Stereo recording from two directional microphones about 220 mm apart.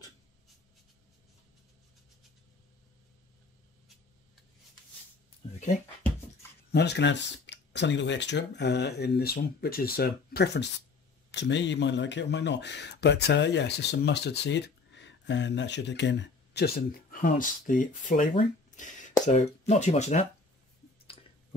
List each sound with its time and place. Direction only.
6.7 s speech: 50° left (ahead or behind); by 20.2 s 30° left (ahead or behind)